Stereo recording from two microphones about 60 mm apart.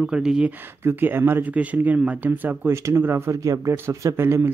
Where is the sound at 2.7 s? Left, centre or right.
Right.